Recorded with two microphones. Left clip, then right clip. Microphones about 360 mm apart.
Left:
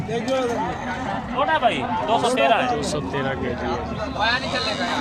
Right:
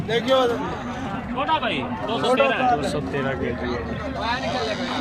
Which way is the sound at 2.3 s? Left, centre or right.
Centre.